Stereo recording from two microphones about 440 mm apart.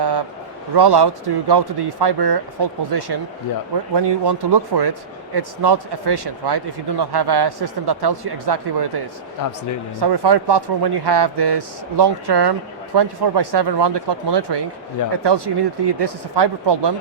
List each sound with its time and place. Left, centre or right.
0.0 s a sound: right
0.7 s speech: right
10.0 s speech: right